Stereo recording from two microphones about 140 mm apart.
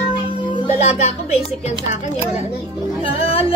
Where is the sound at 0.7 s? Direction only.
55° left (ahead or behind).